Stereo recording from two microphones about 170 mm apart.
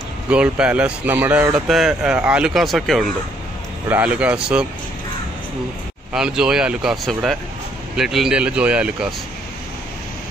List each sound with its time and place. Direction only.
0.3 s speech: 5° right (ahead or behind)
6.1 s speech: 5° right (ahead or behind)